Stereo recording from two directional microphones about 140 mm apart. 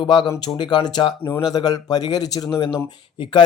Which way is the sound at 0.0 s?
35° left (ahead or behind).